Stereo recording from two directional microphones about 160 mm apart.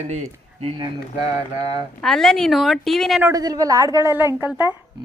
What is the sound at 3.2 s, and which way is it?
A woman's voice, 25° right (ahead or behind).